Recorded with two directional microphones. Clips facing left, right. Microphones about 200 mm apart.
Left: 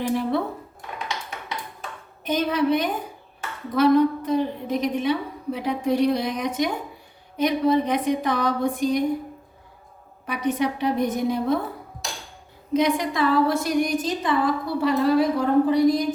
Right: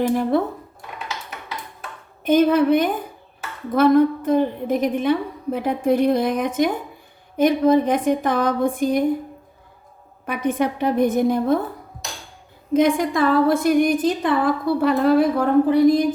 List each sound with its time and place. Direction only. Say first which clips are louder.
0.0 s a woman's voice: right 4 dB; 45° right (ahead or behind)
2.2 s a woman's voice: right 7 dB; 50° right (ahead or behind)
10.2 s a woman's voice: right 2 dB; 55° right (ahead or behind)
12.7 s a woman's voice: right 4 dB; 50° right (ahead or behind)